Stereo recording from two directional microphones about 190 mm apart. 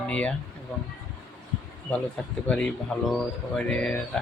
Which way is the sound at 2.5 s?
5° left (ahead or behind).